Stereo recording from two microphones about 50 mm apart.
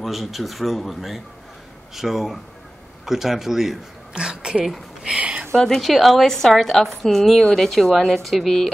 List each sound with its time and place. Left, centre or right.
0.0 s a woman's voice: centre
4.1 s a sound: centre
5.5 s a woman's voice: centre